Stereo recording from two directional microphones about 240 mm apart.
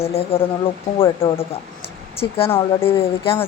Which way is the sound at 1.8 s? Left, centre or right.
Left.